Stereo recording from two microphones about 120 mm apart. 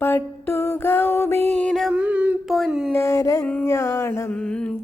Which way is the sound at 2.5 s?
Centre (ahead or behind).